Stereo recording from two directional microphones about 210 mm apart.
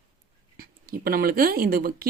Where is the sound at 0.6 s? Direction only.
45° right (ahead or behind).